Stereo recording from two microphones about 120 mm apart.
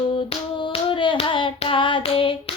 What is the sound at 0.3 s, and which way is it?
Hands, 45° left (ahead or behind).